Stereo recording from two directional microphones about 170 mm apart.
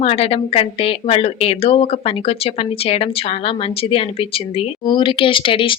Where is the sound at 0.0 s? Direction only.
35° left (ahead or behind).